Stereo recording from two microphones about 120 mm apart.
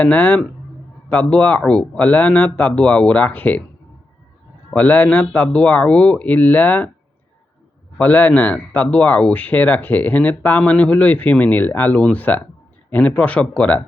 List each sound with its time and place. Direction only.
0.0 s speech: 15° left (ahead or behind)
4.7 s speech: 15° left (ahead or behind)
7.9 s speech: 15° left (ahead or behind)